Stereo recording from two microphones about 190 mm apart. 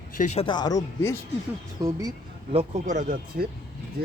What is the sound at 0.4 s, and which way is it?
Speech, 20° left (ahead or behind).